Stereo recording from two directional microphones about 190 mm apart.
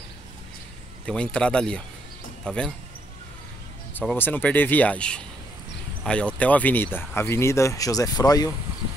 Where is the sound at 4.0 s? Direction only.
5° left (ahead or behind).